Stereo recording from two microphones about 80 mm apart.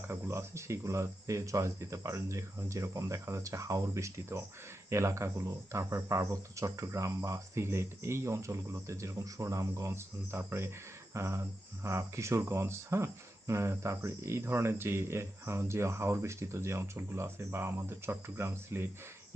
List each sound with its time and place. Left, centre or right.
0.1 s speech: right